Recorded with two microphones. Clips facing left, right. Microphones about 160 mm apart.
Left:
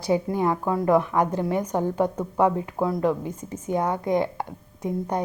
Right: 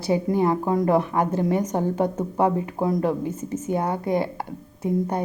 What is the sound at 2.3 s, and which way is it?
Speech, 15° right (ahead or behind).